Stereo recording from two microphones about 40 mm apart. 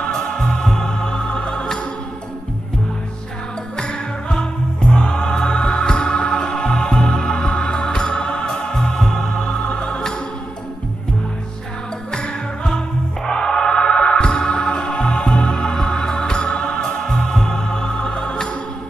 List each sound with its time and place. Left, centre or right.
0.5 s music: centre
3.7 s music: centre
8.7 s music: centre
9.4 s music: left
12.1 s music: centre
17.2 s music: centre